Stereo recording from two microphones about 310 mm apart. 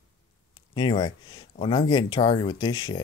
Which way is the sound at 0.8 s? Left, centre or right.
Centre.